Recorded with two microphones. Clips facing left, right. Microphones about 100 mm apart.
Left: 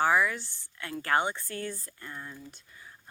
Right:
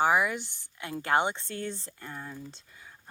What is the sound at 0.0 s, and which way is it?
Speech, 20° right (ahead or behind).